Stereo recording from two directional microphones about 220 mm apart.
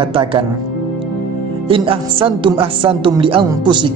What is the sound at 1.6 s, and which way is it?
A man's voice, 25° right (ahead or behind).